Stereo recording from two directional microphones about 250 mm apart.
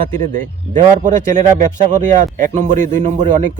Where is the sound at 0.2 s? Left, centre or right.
Right.